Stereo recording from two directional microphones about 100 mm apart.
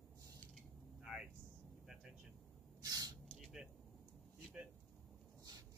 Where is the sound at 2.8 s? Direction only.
40° right (ahead or behind).